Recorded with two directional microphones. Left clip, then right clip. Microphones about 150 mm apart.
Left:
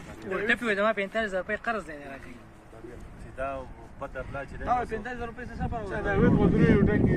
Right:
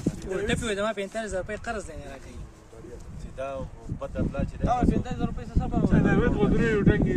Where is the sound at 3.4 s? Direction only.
75° right (ahead or behind).